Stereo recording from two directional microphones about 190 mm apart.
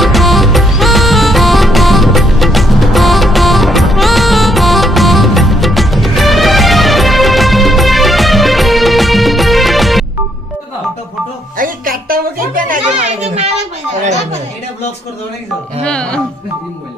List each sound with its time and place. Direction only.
0.0 s music: centre (ahead or behind)
11.5 s music: 45° right (ahead or behind)
15.8 s music: 5° left (ahead or behind)